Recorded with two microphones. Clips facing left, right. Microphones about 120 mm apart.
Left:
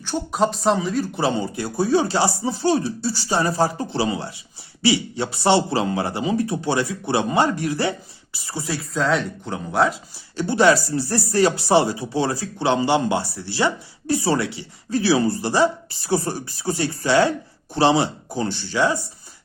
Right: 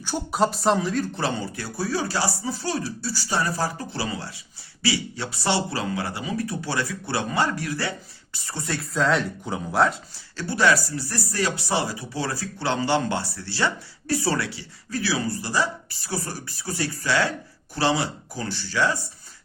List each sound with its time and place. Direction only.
0.0 s speech: 5° right (ahead or behind)
1.1 s speech: 15° left (ahead or behind)
8.3 s speech: 10° left (ahead or behind)
10.3 s speech: 20° left (ahead or behind)